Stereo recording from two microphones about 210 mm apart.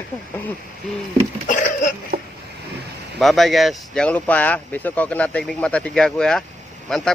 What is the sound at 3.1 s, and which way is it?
Speech, centre (ahead or behind).